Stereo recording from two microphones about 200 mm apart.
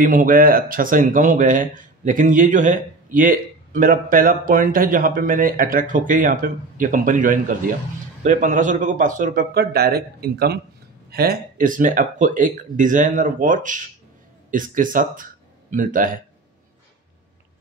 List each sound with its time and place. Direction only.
0.0 s speech: 45° right (ahead or behind)